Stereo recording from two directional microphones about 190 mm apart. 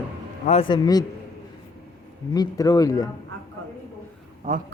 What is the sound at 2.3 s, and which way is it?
Speech, 20° left (ahead or behind).